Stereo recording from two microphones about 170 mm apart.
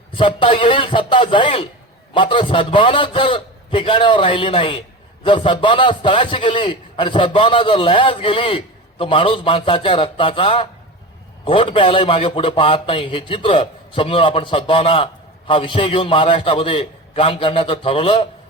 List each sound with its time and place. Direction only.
0.2 s a man's voice: 30° left (ahead or behind)